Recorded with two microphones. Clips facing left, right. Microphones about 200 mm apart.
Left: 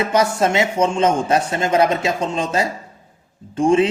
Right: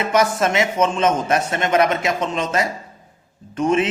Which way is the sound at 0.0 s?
30° left (ahead or behind).